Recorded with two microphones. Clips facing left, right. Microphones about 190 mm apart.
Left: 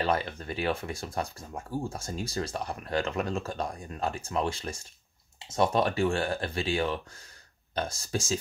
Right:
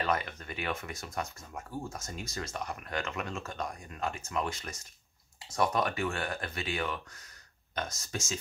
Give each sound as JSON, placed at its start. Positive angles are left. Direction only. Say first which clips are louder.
{"t": 0.0, "sound": "speech", "louder": "left 4 dB", "side_deg": 30}